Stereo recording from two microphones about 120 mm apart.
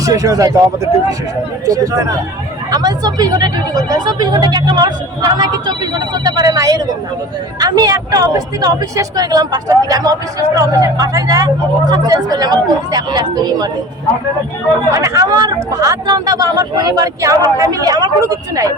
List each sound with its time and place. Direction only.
0.0 s speech: 30° right (ahead or behind)
1.6 s speech: 30° right (ahead or behind)
14.9 s speech: 25° right (ahead or behind)